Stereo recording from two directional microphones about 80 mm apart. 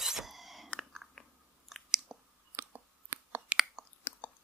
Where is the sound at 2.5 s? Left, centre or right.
Right.